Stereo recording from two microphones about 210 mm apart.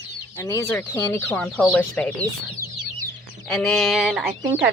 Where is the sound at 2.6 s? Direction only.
45° right (ahead or behind).